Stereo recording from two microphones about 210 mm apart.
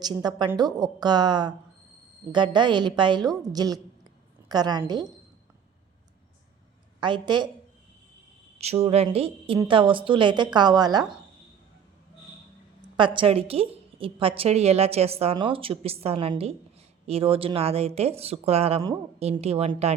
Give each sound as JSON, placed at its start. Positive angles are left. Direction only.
{"t": 0.0, "sound": "a woman's voice", "side_deg": -20}
{"t": 7.0, "sound": "a woman's voice", "side_deg": -20}
{"t": 8.5, "sound": "a woman's voice", "side_deg": -30}
{"t": 13.0, "sound": "a woman's voice", "side_deg": -25}